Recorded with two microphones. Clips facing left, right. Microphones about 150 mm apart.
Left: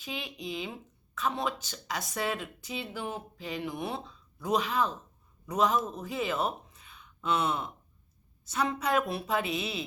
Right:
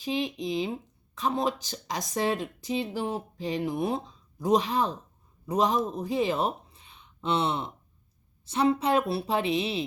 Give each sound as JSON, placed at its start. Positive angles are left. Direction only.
{"t": 0.0, "sound": "speech", "side_deg": -35}